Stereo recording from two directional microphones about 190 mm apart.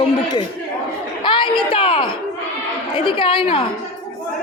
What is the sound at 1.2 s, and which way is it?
A man's voice, 25° left (ahead or behind).